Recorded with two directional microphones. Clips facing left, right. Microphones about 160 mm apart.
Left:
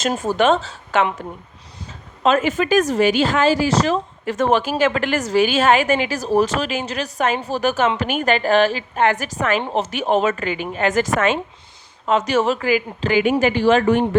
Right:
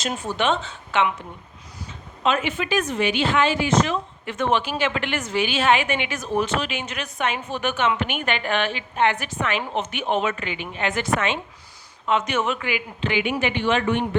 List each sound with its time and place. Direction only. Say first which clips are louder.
0.0 s a woman's voice: left 7 dB; 45° left (ahead or behind)